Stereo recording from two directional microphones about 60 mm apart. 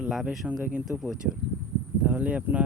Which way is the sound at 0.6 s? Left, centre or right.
Right.